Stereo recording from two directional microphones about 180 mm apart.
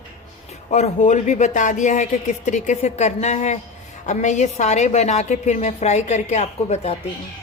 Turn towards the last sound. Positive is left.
turn(degrees=35)  # may be behind; listen again after turning